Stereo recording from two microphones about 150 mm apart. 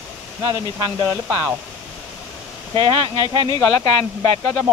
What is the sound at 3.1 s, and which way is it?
Speech, 30° left (ahead or behind).